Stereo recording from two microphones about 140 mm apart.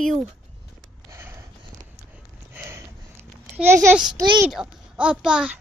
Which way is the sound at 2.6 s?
15° right (ahead or behind).